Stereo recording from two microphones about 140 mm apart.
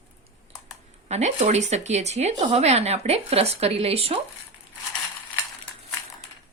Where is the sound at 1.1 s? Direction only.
55° right (ahead or behind).